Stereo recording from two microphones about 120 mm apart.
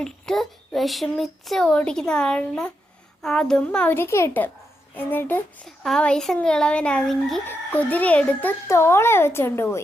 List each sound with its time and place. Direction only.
0.0 s speech: 5° left (ahead or behind)
3.2 s chicken: 5° left (ahead or behind)
3.9 s a child's voice: 20° left (ahead or behind)
4.9 s chicken: 15° left (ahead or behind)
5.6 s speech: 5° left (ahead or behind)
7.4 s chicken: 15° left (ahead or behind)
8.6 s a child's voice: 20° left (ahead or behind)